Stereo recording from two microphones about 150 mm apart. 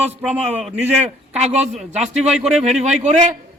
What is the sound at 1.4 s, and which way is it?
Speech, 50° right (ahead or behind).